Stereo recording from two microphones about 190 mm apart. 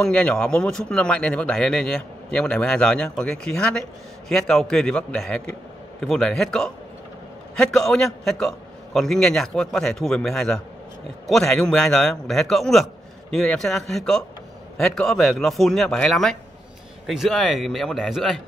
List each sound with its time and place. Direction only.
0.0 s a man's voice: 5° left (ahead or behind)